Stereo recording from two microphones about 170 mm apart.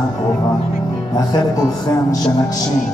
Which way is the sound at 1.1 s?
25° left (ahead or behind).